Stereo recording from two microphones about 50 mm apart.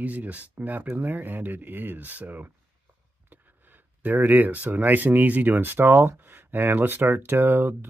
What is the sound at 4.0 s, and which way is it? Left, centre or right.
Speech, right.